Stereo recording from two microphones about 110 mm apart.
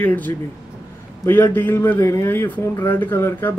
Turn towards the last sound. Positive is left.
turn(degrees=20)  # may be behind; listen again after turning